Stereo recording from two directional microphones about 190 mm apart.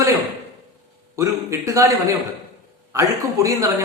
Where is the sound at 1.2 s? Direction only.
15° right (ahead or behind).